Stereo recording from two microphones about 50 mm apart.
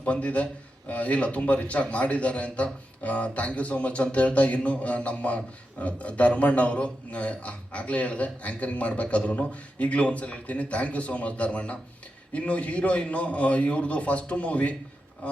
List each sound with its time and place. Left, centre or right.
0.0 s a man's voice: left